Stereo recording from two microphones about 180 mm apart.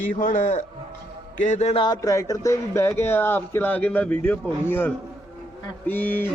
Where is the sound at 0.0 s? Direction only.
45° left (ahead or behind).